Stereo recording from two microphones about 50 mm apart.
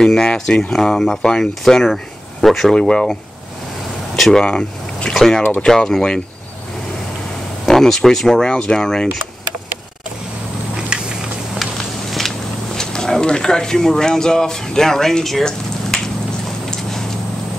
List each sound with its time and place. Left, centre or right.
0.0 s speech: centre
2.7 s speech: centre
4.4 s speech: centre
5.1 s speech: centre
7.6 s speech: centre
10.9 s a sound: centre
11.5 s a sound: centre